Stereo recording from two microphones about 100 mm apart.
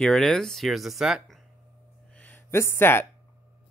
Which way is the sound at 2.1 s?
20° left (ahead or behind).